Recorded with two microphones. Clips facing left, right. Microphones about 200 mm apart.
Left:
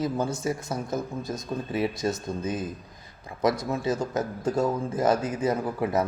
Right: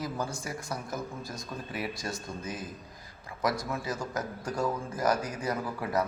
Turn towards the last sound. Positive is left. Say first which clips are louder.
# left 5 dB
turn(degrees=25)  # may be behind; listen again after turning